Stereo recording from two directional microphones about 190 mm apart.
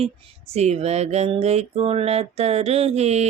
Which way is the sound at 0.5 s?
35° right (ahead or behind).